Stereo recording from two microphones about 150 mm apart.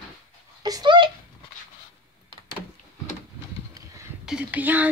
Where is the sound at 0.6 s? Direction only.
30° right (ahead or behind).